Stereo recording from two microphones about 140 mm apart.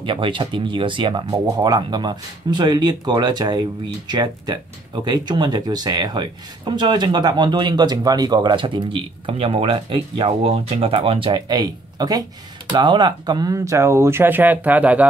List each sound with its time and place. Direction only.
0.0 s speech: 35° right (ahead or behind); by 15.0 s 10° right (ahead or behind)